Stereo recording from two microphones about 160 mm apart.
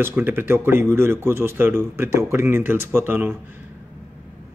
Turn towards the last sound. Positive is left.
turn(degrees=-15)  # may be behind; listen again after turning